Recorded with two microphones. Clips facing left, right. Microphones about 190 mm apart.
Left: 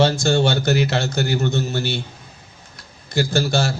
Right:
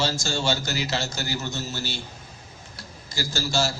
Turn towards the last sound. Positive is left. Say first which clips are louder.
# left 6 dB
turn(degrees=60)  # may be behind; listen again after turning